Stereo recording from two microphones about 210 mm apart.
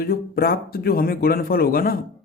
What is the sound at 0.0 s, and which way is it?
A man's voice, 45° left (ahead or behind).